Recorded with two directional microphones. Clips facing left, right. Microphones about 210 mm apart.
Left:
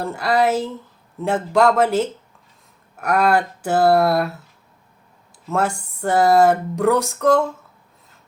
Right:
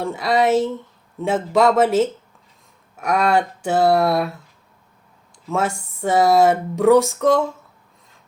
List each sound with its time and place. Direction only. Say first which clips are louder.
0.0 s speech: even; centre (ahead or behind)
5.5 s speech: left 1 dB; centre (ahead or behind)